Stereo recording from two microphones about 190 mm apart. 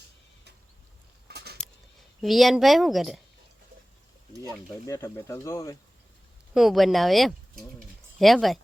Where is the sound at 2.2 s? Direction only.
Centre (ahead or behind).